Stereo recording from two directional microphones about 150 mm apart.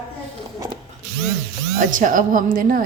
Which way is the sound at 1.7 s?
65° right (ahead or behind).